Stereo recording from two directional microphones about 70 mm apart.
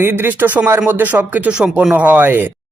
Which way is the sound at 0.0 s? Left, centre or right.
Right.